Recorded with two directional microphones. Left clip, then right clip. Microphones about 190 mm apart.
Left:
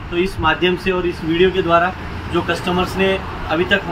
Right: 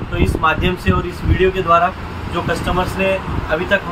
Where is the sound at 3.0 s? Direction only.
10° right (ahead or behind).